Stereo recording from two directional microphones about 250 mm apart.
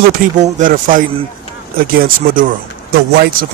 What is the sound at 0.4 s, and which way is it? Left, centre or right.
Speech, right.